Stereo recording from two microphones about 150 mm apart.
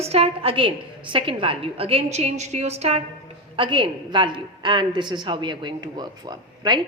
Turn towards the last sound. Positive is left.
turn(degrees=-30)  # may be behind; listen again after turning